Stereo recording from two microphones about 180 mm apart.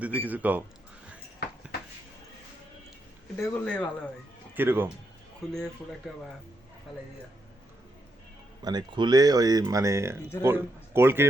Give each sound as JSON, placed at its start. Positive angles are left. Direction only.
{"t": 0.0, "sound": "a man's voice", "side_deg": -10}
{"t": 3.4, "sound": "speech", "side_deg": 10}
{"t": 4.5, "sound": "a man's voice", "side_deg": -10}
{"t": 5.5, "sound": "speech", "side_deg": 5}
{"t": 8.6, "sound": "a man's voice", "side_deg": -25}